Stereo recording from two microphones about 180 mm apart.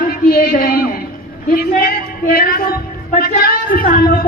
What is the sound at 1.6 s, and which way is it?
A woman's voice, 55° left (ahead or behind).